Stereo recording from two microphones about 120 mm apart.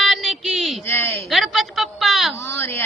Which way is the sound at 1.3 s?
Centre (ahead or behind).